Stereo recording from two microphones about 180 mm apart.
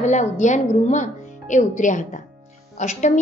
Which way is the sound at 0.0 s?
40° left (ahead or behind).